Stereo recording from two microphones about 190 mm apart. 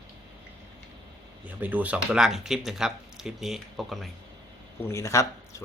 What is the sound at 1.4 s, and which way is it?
Speech, 10° right (ahead or behind).